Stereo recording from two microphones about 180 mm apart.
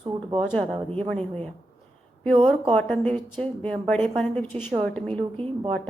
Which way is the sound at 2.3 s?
25° right (ahead or behind).